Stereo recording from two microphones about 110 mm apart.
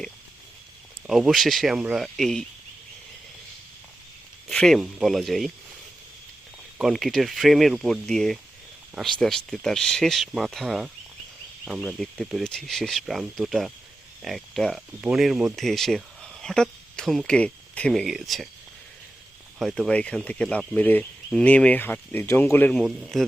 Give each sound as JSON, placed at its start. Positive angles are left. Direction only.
{"t": 1.0, "sound": "speech", "side_deg": -5}
{"t": 4.4, "sound": "speech", "side_deg": 5}
{"t": 6.7, "sound": "speech", "side_deg": 0}
{"t": 18.0, "sound": "speech", "side_deg": 0}
{"t": 19.5, "sound": "speech", "side_deg": 0}
{"t": 22.7, "sound": "speech", "side_deg": 0}